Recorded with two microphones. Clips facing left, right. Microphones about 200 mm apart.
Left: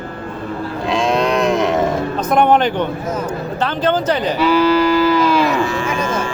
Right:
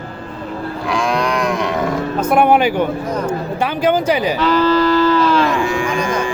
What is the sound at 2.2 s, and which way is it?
Music, 10° right (ahead or behind).